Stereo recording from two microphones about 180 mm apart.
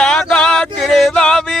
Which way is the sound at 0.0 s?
5° left (ahead or behind).